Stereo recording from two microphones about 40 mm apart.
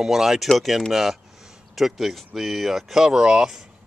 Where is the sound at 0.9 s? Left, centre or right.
Centre.